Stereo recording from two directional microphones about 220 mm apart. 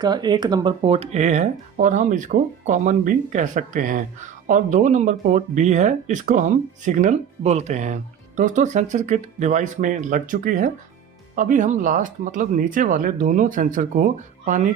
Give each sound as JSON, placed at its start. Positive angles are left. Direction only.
{"t": 0.0, "sound": "speech", "side_deg": -20}